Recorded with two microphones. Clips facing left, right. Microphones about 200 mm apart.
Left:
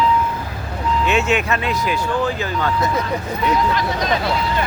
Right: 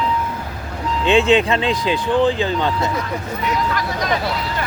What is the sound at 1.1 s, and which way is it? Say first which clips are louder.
Speech: right 6 dB; 30° right (ahead or behind).